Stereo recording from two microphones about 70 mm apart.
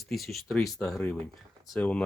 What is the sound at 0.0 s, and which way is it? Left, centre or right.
Speech, centre.